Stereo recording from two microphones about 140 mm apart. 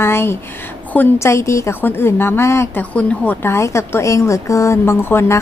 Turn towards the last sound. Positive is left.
turn(degrees=15)  # may be behind; listen again after turning